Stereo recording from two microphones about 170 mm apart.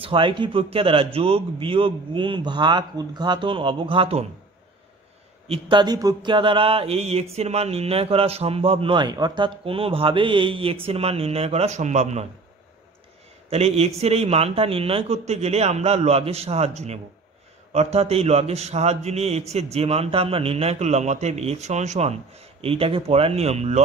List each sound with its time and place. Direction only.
0.0 s a man's voice: 30° right (ahead or behind)
5.5 s a man's voice: 30° right (ahead or behind)
13.5 s a man's voice: 40° right (ahead or behind)